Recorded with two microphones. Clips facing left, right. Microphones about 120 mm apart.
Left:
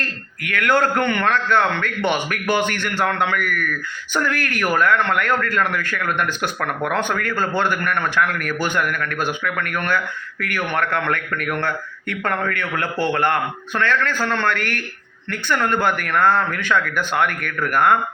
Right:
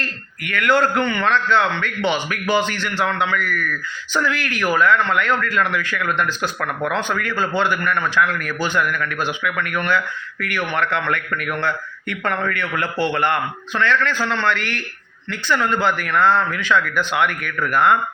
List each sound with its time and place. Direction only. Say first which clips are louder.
0.4 s a man's voice: right 1 dB; 50° left (ahead or behind)